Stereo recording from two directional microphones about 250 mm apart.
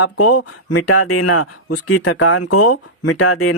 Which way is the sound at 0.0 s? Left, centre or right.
Left.